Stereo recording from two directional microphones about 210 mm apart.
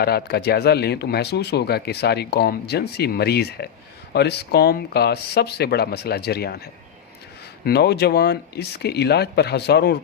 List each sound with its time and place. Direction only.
0.0 s speech: 50° left (ahead or behind)
7.6 s speech: 50° left (ahead or behind)